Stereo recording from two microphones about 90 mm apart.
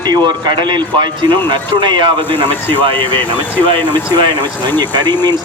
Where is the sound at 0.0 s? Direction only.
50° right (ahead or behind).